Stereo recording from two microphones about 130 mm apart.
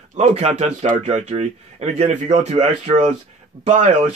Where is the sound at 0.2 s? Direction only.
55° right (ahead or behind).